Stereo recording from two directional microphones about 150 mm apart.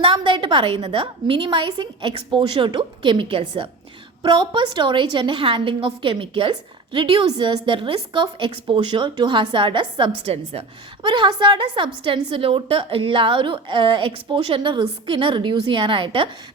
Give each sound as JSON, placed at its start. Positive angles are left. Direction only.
{"t": 0.0, "sound": "a woman's voice", "side_deg": -35}